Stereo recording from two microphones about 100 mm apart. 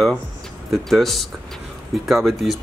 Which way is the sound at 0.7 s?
Centre (ahead or behind).